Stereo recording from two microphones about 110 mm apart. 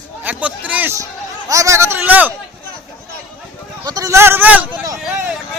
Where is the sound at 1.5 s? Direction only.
30° right (ahead or behind).